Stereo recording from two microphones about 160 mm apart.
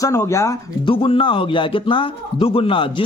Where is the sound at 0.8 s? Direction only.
30° left (ahead or behind).